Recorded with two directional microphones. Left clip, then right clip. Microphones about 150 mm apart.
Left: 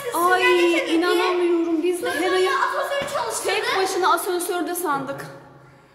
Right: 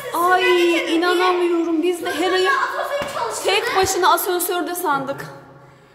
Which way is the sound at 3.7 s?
15° right (ahead or behind).